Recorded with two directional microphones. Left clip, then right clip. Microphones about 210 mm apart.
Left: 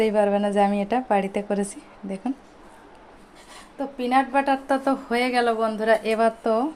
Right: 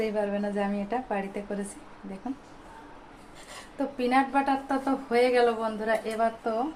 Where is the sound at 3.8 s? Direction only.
10° left (ahead or behind).